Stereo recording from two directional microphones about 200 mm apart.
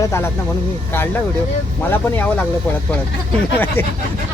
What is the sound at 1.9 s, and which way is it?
Speech, 10° left (ahead or behind).